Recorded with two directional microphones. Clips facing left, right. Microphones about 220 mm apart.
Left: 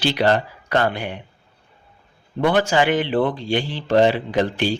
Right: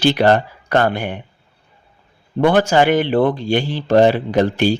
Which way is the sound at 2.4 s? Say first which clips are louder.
Right 4 dB; 45° right (ahead or behind).